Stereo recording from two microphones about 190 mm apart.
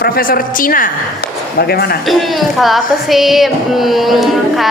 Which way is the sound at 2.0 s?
Centre (ahead or behind).